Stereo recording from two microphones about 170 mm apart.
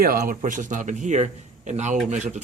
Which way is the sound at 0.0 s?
55° right (ahead or behind).